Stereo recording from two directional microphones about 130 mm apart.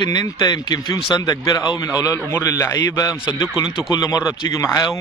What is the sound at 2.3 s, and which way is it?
A man's voice, 20° left (ahead or behind).